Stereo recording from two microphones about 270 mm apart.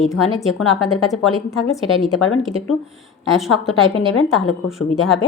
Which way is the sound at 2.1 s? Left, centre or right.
Left.